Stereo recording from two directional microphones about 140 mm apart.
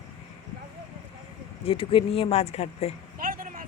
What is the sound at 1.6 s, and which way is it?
Speech, 40° left (ahead or behind).